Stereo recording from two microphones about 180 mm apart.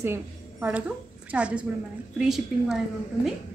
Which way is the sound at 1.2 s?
5° right (ahead or behind).